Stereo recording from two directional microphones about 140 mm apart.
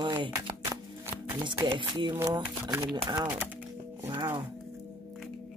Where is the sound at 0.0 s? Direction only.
35° right (ahead or behind).